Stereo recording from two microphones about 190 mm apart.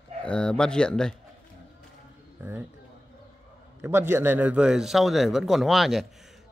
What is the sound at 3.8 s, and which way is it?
A man's voice, 15° right (ahead or behind).